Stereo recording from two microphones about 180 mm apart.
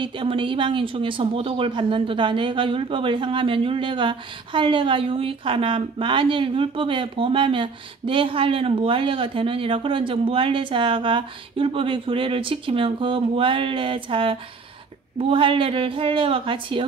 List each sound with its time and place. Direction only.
0.0 s speech: 30° right (ahead or behind)